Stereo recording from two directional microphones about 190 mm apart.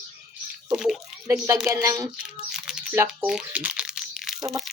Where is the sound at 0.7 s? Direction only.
Centre (ahead or behind).